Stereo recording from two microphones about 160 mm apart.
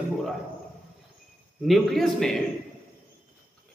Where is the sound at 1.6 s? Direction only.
Centre (ahead or behind).